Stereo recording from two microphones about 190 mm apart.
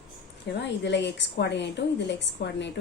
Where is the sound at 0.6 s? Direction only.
65° left (ahead or behind).